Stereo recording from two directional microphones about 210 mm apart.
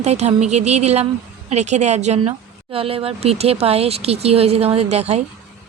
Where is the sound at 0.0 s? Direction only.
30° right (ahead or behind).